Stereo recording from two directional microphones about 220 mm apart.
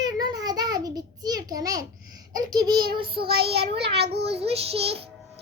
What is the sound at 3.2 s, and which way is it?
Child singing, 45° right (ahead or behind).